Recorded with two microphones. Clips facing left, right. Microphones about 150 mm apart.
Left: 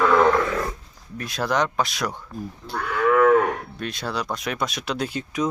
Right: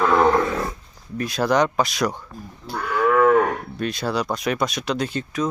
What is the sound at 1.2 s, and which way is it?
Speech, centre (ahead or behind).